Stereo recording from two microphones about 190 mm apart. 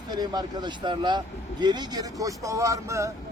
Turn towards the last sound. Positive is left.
turn(degrees=-15)  # may be behind; listen again after turning